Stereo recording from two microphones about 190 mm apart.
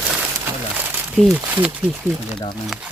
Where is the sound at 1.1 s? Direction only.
5° right (ahead or behind).